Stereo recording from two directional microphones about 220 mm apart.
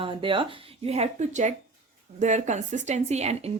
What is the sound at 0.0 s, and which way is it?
Speech, 25° right (ahead or behind).